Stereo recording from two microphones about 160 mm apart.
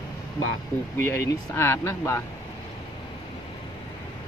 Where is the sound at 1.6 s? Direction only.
15° left (ahead or behind).